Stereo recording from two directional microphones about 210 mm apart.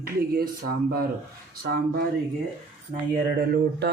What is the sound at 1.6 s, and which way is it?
Speech, 45° right (ahead or behind).